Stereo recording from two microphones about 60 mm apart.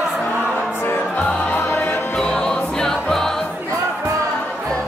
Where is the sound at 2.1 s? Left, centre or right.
Centre.